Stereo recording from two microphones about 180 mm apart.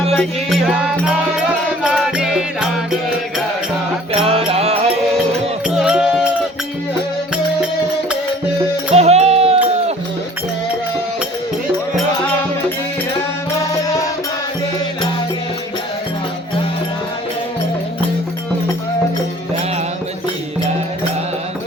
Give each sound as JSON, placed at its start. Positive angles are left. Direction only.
{"t": 0.1, "sound": "music", "side_deg": 0}
{"t": 4.3, "sound": "music", "side_deg": -35}
{"t": 5.6, "sound": "music", "side_deg": -5}
{"t": 8.9, "sound": "music", "side_deg": -35}